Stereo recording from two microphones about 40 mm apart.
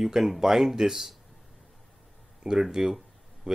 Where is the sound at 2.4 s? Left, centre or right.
Centre.